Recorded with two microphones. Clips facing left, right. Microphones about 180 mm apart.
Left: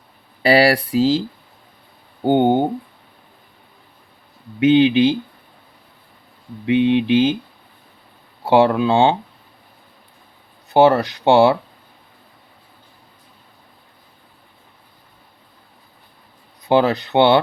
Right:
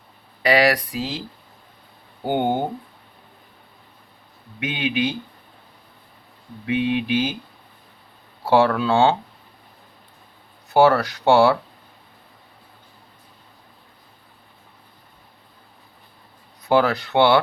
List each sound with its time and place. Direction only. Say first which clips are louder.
0.4 s speech: left 4 dB; 30° left (ahead or behind)
2.2 s speech: left 7 dB; 20° left (ahead or behind)
4.6 s speech: left 11 dB; 25° left (ahead or behind)
6.7 s speech: left 6 dB; 25° left (ahead or behind)
8.4 s speech: left 3 dB; 20° left (ahead or behind)
10.8 s speech: left 3 dB; 20° left (ahead or behind)
16.6 s speech: left 3 dB; 20° left (ahead or behind)